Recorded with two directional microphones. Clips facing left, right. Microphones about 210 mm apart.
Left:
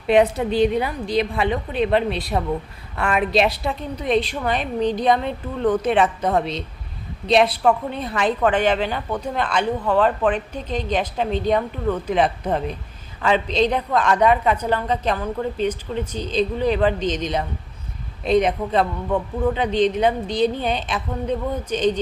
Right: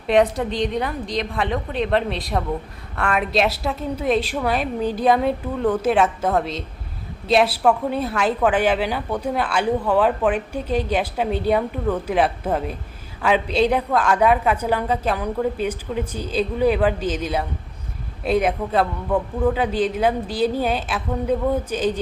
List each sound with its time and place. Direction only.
0.1 s a woman's voice: centre (ahead or behind)